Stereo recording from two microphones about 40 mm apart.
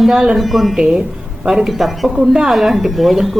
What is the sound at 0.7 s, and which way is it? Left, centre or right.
Speech, centre.